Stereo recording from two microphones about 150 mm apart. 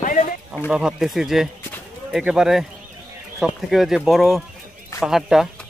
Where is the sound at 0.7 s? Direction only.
5° right (ahead or behind).